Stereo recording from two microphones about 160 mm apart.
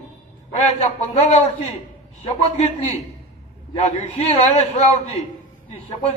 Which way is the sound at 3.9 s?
40° left (ahead or behind).